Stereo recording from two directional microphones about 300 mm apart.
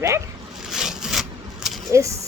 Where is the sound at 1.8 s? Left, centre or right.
Centre.